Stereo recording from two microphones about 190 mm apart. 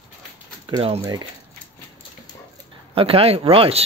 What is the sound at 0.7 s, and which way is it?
Speech, 30° right (ahead or behind).